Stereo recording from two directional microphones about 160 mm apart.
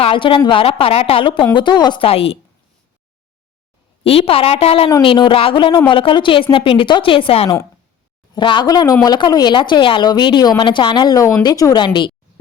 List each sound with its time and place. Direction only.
0.0 s a woman's voice: 35° left (ahead or behind)
4.0 s a woman's voice: 35° left (ahead or behind)